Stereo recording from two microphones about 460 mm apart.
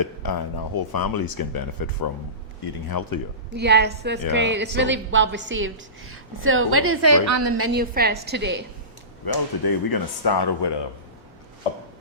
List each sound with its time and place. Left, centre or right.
0.0 s speech: left
3.5 s a woman's voice: right
9.2 s speech: left